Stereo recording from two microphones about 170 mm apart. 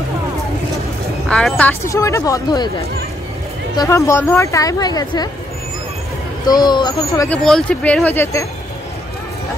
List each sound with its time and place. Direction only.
1.3 s speech: 5° left (ahead or behind)
3.7 s speech: 20° left (ahead or behind)
6.4 s speech: 25° left (ahead or behind)
7.2 s speech: 5° left (ahead or behind)